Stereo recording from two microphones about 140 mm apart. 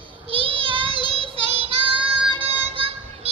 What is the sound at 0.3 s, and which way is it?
Child singing, 40° right (ahead or behind).